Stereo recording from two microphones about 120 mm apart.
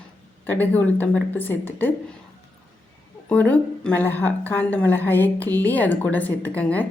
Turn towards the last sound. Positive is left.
turn(degrees=15)  # may be behind; listen again after turning